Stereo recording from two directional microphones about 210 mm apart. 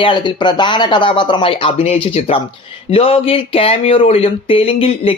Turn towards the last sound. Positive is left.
turn(degrees=25)  # may be behind; listen again after turning